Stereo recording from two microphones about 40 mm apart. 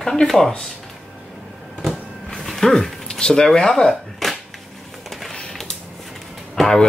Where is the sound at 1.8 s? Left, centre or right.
Centre.